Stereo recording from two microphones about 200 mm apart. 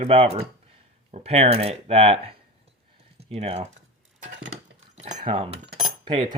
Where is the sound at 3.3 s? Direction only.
30° right (ahead or behind).